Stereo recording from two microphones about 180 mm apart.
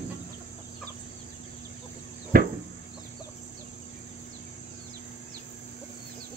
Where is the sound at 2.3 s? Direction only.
50° right (ahead or behind).